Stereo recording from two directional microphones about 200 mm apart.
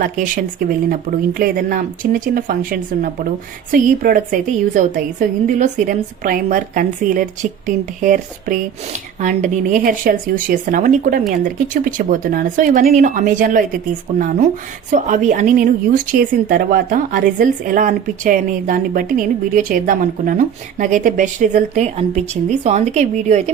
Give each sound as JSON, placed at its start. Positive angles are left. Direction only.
{"t": 0.0, "sound": "a woman's voice", "side_deg": -45}